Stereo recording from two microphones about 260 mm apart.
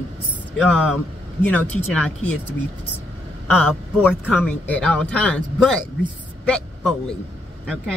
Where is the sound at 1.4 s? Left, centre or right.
Centre.